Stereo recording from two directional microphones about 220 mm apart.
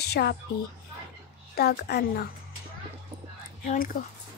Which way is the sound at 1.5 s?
45° left (ahead or behind).